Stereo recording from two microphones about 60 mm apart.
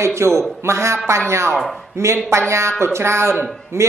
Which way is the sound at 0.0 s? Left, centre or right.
Right.